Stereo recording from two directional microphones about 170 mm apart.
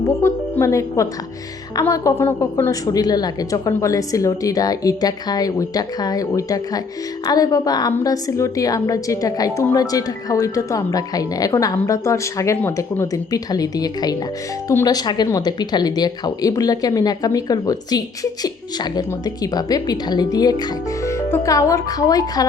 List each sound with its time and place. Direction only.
0.2 s a woman's voice: 15° left (ahead or behind)